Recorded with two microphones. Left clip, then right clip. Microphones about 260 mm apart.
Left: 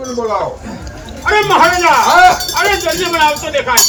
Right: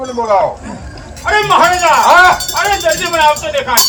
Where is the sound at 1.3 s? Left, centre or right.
Centre.